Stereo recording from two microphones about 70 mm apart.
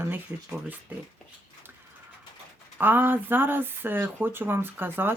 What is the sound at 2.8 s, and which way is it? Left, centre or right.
Speech, right.